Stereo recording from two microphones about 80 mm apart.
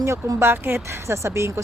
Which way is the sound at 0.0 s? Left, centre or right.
Right.